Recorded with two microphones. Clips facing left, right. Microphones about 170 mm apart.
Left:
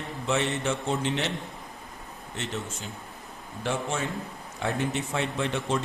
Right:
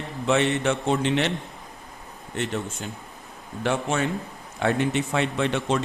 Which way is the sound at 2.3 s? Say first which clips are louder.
Right 6 dB; 55° right (ahead or behind).